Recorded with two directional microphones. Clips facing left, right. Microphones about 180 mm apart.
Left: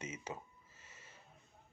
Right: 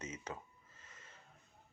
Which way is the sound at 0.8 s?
10° left (ahead or behind).